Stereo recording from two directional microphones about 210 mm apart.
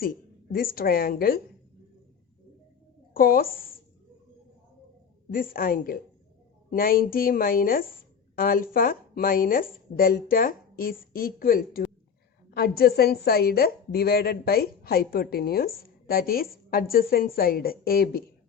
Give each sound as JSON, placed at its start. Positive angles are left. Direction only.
{"t": 0.0, "sound": "a woman's voice", "side_deg": 45}
{"t": 3.2, "sound": "a woman's voice", "side_deg": 45}
{"t": 5.3, "sound": "a woman's voice", "side_deg": 40}